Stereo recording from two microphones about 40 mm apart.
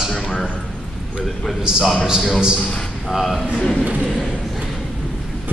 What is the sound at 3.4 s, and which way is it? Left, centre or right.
Speech, centre.